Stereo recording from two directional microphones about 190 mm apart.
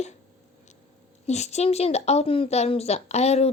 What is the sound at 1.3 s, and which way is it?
Speech, 35° left (ahead or behind).